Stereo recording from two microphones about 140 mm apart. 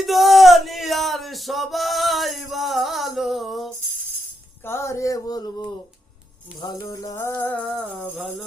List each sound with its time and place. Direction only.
0.0 s music: centre (ahead or behind)
4.6 s a sound: 15° left (ahead or behind)
6.6 s music: 30° left (ahead or behind); by 7.7 s 10° left (ahead or behind)